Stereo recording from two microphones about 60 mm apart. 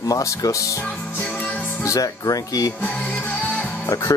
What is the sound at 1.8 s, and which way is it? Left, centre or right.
Speech, left.